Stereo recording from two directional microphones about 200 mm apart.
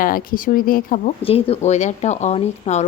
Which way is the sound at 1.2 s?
30° left (ahead or behind).